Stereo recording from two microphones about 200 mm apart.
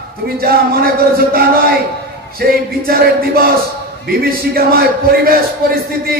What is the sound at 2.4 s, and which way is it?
A man's voice, 50° right (ahead or behind).